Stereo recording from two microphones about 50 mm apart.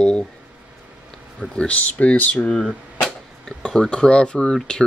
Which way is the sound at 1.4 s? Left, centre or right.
Left.